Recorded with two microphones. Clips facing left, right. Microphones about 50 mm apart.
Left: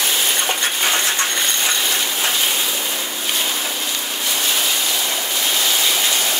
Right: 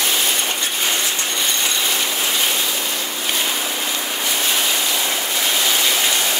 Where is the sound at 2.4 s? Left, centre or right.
Centre.